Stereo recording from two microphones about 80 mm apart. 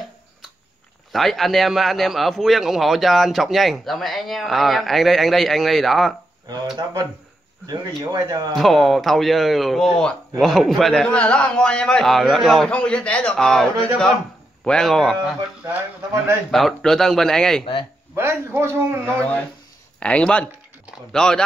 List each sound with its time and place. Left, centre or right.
1.1 s a man's voice: centre
6.8 s speech: right
8.5 s a man's voice: centre
11.1 s a man's voice: centre
12.6 s a man's voice: centre
16.4 s a man's voice: centre
18.1 s a man's voice: right
19.1 s a man's voice: centre